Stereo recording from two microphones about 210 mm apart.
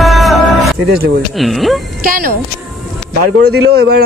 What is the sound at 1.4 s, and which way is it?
Speech, centre (ahead or behind).